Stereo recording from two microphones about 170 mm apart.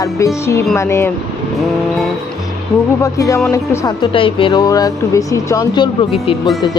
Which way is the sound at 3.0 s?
20° left (ahead or behind).